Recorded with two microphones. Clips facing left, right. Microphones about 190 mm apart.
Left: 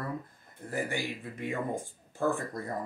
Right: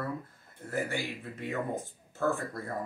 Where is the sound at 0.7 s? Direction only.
15° left (ahead or behind).